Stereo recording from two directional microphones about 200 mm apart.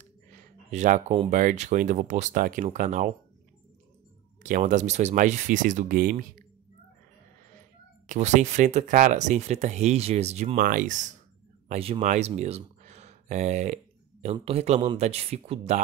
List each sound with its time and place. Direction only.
0.7 s speech: 35° right (ahead or behind)
4.4 s speech: 40° right (ahead or behind)
8.1 s speech: 35° right (ahead or behind)